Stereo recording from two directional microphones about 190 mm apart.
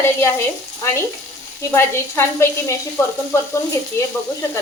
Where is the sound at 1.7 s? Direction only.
15° left (ahead or behind).